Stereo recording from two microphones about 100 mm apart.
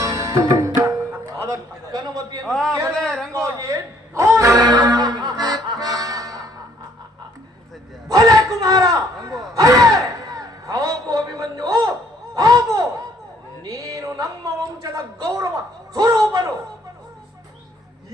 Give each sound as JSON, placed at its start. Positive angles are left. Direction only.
{"t": 0.0, "sound": "music", "side_deg": -35}
{"t": 2.4, "sound": "a man's voice", "side_deg": 5}
{"t": 3.3, "sound": "music", "side_deg": -30}
{"t": 8.0, "sound": "a sound", "side_deg": -40}
{"t": 9.6, "sound": "music", "side_deg": -35}
{"t": 12.3, "sound": "a sound", "side_deg": -35}
{"t": 16.0, "sound": "a man's voice", "side_deg": -40}